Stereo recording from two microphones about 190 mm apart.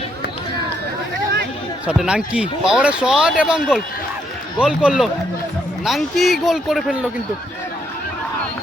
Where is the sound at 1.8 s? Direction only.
5° right (ahead or behind).